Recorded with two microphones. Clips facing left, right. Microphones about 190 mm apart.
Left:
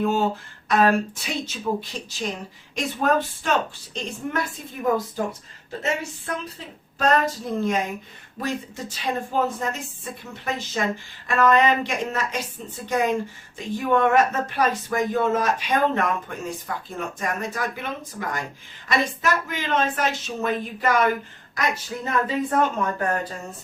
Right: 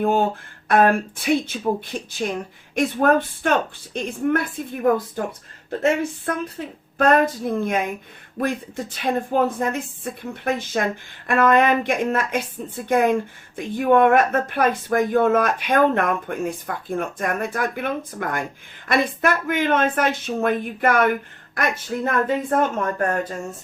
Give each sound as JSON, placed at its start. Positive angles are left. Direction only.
{"t": 0.0, "sound": "speech", "side_deg": -55}